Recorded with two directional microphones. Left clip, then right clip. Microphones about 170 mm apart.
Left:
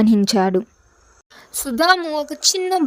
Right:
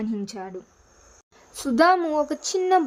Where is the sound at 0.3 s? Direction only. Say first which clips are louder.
Left 18 dB; 60° left (ahead or behind).